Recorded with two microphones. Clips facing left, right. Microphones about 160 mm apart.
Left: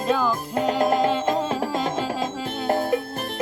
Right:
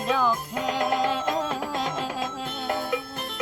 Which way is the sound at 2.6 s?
40° left (ahead or behind).